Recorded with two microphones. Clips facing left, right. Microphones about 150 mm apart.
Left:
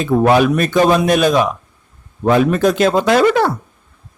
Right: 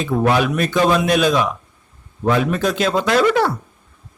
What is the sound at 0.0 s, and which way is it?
Speech, 50° left (ahead or behind).